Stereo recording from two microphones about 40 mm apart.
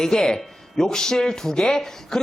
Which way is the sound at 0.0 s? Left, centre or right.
Centre.